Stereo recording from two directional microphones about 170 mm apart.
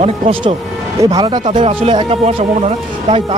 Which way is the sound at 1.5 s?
40° right (ahead or behind).